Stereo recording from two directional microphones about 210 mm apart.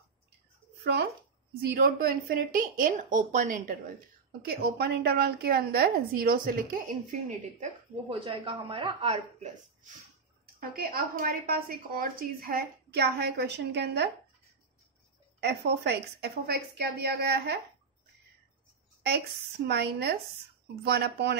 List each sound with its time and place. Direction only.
0.8 s a woman's voice: 50° right (ahead or behind)
4.5 s a woman's voice: 50° right (ahead or behind)
8.1 s speech: 25° right (ahead or behind)
10.6 s a woman's voice: 45° right (ahead or behind)
15.4 s a woman's voice: 50° right (ahead or behind)
19.0 s a woman's voice: 50° right (ahead or behind)